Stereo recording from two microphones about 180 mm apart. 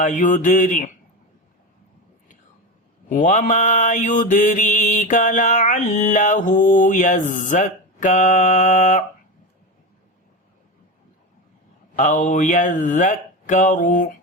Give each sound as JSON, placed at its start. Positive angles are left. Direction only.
{"t": 0.0, "sound": "mantra", "side_deg": 45}
{"t": 3.1, "sound": "mantra", "side_deg": 45}
{"t": 11.9, "sound": "mantra", "side_deg": 45}